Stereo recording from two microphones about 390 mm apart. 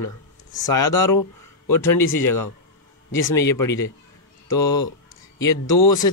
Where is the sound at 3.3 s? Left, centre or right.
Centre.